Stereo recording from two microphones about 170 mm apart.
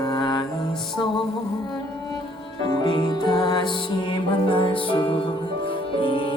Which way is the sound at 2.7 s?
25° left (ahead or behind).